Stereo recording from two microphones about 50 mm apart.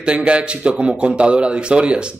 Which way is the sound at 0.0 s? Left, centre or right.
Right.